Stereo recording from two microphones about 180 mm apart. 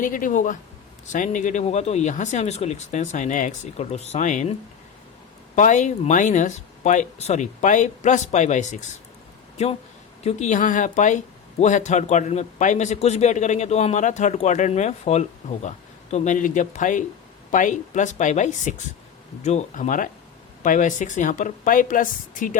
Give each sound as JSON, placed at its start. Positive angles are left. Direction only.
{"t": 0.0, "sound": "a man's voice", "side_deg": 50}
{"t": 5.5, "sound": "a man's voice", "side_deg": 45}